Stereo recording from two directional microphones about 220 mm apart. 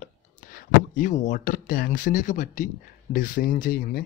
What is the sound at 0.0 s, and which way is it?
Speech, 40° left (ahead or behind).